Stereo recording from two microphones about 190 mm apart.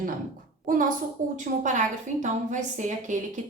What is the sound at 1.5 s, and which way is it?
A woman's voice, 45° right (ahead or behind).